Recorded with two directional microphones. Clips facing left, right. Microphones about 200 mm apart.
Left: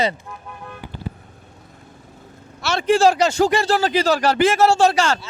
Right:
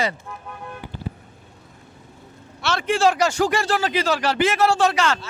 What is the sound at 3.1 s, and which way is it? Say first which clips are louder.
Speech: left 3 dB; 25° left (ahead or behind).